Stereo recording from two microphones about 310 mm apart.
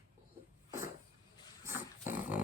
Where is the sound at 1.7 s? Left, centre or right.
Centre.